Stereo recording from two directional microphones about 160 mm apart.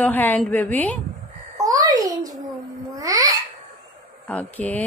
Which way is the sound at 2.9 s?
20° right (ahead or behind).